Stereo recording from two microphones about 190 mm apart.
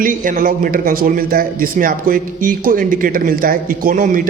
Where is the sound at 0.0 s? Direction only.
45° right (ahead or behind).